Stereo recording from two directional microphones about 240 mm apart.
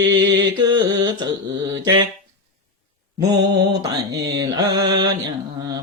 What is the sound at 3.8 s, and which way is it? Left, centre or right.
Mantra, centre.